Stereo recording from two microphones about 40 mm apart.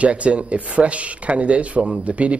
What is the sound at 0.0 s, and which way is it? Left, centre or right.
A man's voice, right.